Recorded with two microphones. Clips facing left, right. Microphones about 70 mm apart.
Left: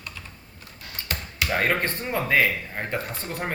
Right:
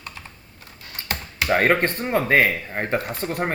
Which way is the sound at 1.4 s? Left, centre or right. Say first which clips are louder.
Right 5 dB; right.